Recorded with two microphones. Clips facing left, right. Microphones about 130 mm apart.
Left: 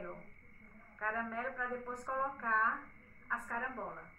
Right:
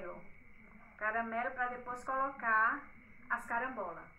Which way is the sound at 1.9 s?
Centre (ahead or behind).